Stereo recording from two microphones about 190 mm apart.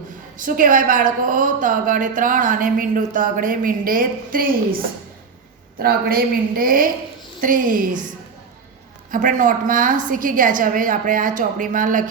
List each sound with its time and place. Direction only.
0.3 s a woman's voice: 45° right (ahead or behind)
9.1 s a woman's voice: 45° right (ahead or behind)